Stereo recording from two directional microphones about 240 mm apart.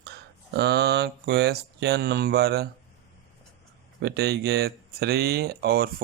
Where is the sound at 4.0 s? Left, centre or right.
Right.